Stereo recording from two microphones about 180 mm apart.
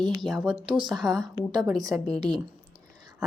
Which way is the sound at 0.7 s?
25° right (ahead or behind).